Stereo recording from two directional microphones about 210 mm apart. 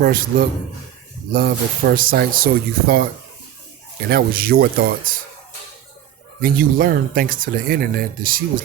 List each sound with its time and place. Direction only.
0.0 s speech: 45° right (ahead or behind)
4.1 s speech: 45° right (ahead or behind)
6.4 s speech: 45° right (ahead or behind)